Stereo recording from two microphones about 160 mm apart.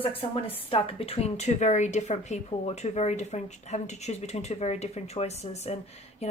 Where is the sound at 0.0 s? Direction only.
35° left (ahead or behind).